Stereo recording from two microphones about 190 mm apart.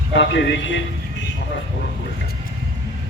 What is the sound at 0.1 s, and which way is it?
Speech, 70° left (ahead or behind).